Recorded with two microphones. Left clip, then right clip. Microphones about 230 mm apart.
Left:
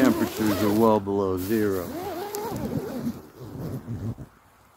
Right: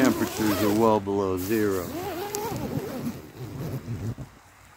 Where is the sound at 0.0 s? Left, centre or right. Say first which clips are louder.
Left 1 dB; centre.